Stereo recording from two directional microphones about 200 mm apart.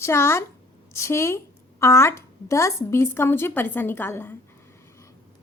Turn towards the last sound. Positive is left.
turn(degrees=10)  # may be behind; listen again after turning